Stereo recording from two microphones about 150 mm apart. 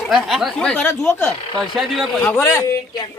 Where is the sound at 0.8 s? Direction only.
15° left (ahead or behind).